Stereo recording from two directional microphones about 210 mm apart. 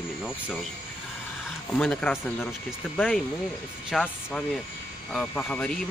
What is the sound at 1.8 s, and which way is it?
Speech, 5° left (ahead or behind).